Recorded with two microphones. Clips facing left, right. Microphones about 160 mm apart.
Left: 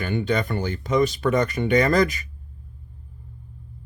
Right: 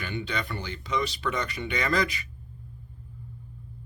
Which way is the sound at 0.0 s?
50° left (ahead or behind).